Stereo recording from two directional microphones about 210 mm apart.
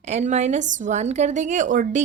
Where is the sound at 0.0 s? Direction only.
30° right (ahead or behind).